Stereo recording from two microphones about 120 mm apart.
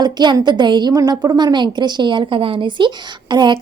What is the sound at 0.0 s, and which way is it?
A woman's voice, 35° right (ahead or behind).